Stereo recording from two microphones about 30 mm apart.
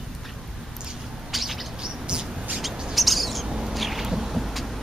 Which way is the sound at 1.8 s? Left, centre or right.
Right.